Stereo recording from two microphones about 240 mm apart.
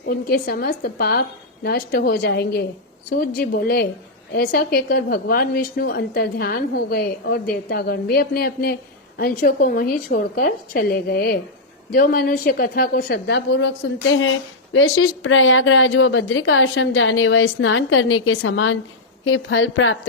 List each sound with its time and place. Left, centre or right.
0.0 s a woman's voice: left